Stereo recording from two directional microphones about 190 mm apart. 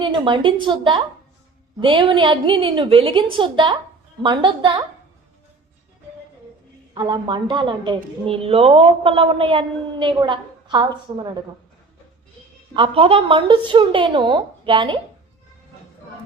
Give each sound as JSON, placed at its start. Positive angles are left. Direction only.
{"t": 0.0, "sound": "a woman's voice", "side_deg": -25}
{"t": 6.9, "sound": "a woman's voice", "side_deg": -25}
{"t": 12.7, "sound": "a woman's voice", "side_deg": -30}